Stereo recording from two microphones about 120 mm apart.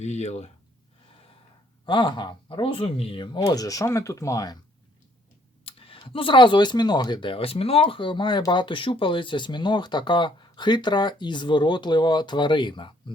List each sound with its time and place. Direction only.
0.0 s speech: 70° left (ahead or behind)
1.9 s speech: 40° left (ahead or behind)
3.4 s speech: 30° left (ahead or behind)
5.6 s clicking: 50° left (ahead or behind)
6.0 s speech: 45° left (ahead or behind)